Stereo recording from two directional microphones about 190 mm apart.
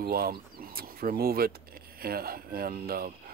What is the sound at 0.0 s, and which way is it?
Speech, 50° right (ahead or behind).